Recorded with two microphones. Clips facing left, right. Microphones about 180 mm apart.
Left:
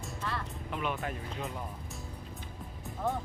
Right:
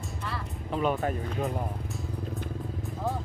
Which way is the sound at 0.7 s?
35° right (ahead or behind).